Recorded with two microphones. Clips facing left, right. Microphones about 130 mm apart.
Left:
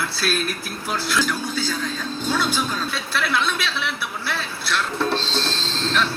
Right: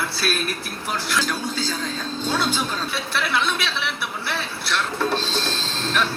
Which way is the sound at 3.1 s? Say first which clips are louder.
Left 1 dB; 20° right (ahead or behind).